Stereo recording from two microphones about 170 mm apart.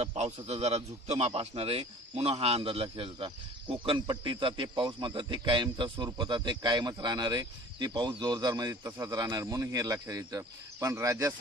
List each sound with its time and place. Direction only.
0.0 s a man's voice: 40° right (ahead or behind); by 11.3 s 20° right (ahead or behind)